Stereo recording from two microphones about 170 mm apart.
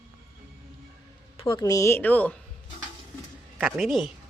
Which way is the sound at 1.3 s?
30° left (ahead or behind).